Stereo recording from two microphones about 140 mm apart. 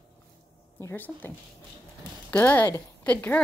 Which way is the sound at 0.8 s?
15° left (ahead or behind).